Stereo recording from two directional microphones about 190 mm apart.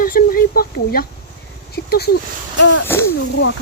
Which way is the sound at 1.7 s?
55° left (ahead or behind).